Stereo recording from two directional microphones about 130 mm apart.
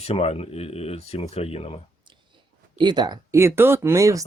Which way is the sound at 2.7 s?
35° right (ahead or behind).